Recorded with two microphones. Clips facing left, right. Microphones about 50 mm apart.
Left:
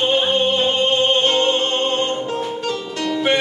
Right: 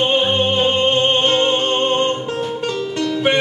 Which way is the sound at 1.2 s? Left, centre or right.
Right.